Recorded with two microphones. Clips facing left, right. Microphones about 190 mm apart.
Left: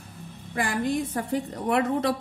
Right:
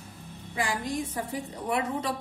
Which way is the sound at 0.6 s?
60° left (ahead or behind).